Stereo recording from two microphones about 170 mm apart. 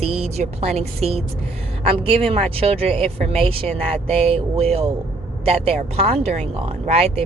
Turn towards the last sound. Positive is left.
turn(degrees=-35)  # may be behind; listen again after turning